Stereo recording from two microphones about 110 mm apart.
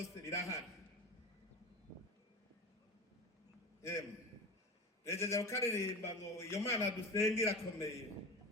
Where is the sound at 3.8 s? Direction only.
25° left (ahead or behind).